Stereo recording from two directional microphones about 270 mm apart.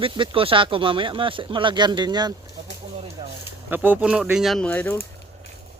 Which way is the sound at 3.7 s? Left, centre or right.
Centre.